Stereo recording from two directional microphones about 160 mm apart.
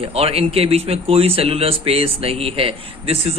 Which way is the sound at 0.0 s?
40° right (ahead or behind).